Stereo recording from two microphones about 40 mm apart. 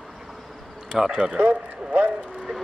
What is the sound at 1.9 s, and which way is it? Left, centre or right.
Speech, right.